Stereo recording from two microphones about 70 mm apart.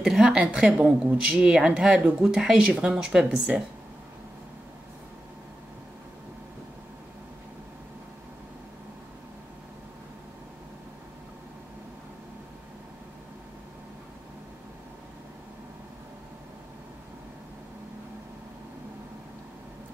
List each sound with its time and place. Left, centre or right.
0.0 s a woman's voice: centre